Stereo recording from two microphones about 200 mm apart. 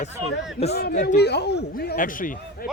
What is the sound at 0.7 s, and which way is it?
A man's voice, 55° left (ahead or behind).